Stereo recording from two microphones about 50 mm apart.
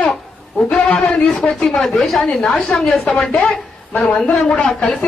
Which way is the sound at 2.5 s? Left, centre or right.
Left.